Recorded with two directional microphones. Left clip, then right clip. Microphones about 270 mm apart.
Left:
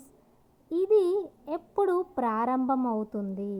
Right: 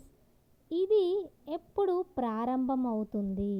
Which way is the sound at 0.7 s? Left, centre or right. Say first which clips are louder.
Left 4 dB; centre.